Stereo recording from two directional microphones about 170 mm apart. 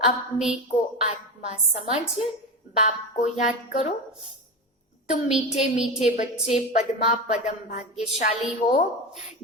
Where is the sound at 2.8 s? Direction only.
45° left (ahead or behind).